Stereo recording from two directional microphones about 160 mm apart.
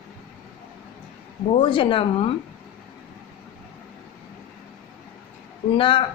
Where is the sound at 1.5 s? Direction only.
30° left (ahead or behind).